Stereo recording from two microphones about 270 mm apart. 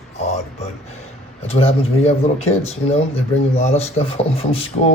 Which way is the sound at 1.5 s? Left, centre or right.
Left.